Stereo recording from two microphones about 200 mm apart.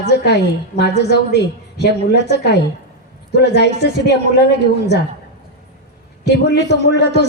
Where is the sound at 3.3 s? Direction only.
55° left (ahead or behind).